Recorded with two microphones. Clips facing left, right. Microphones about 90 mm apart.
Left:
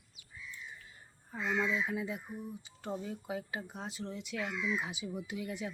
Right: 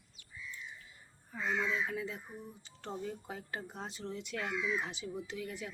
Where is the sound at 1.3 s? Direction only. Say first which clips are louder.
Left 1 dB; 30° left (ahead or behind).